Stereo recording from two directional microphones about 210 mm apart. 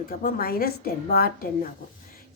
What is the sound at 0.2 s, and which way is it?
A woman's voice, 45° left (ahead or behind).